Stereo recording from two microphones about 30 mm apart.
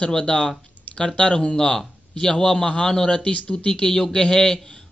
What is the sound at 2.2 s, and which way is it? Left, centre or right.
Speech, left.